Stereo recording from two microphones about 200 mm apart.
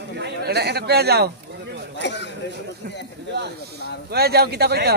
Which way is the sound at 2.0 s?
60° left (ahead or behind).